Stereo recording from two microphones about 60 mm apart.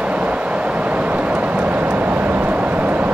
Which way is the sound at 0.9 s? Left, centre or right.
Right.